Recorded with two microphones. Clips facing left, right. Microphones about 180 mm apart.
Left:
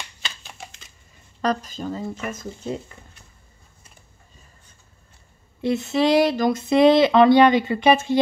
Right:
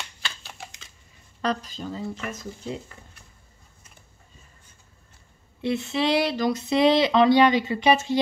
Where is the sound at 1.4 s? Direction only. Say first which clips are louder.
Left 4 dB; 45° left (ahead or behind).